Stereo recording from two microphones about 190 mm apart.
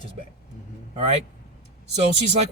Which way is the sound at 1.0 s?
35° right (ahead or behind).